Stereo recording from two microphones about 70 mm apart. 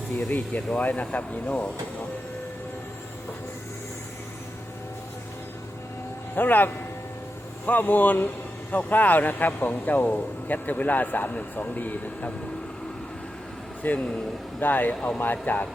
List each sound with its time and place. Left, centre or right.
0.3 s speech: left
6.3 s speech: left
13.8 s speech: left